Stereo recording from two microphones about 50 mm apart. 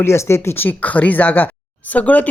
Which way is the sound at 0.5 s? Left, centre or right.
Left.